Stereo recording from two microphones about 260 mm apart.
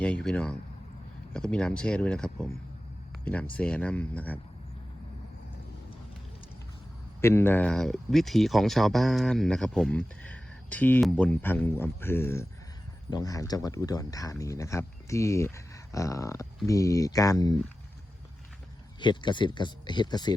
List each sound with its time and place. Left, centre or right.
0.0 s speech: centre
7.2 s speech: centre
18.9 s speech: centre